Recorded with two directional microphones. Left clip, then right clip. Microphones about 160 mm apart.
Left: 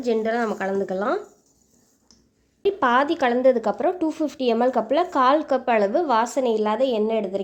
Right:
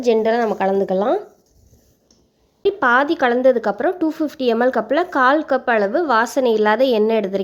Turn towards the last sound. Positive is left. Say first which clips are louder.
# right 6 dB
turn(degrees=-25)  # may be behind; listen again after turning